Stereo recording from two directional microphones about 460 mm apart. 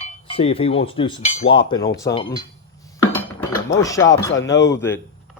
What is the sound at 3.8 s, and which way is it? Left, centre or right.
Speech, centre.